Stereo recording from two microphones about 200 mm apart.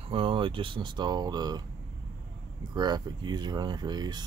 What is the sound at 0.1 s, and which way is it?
Speech, 25° right (ahead or behind).